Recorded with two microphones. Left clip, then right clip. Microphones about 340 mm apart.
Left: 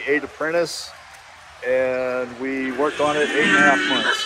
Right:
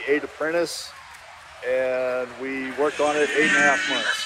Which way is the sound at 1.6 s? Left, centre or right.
Left.